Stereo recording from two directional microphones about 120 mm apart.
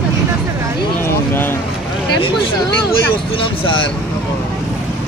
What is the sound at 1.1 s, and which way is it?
Speech, 20° left (ahead or behind).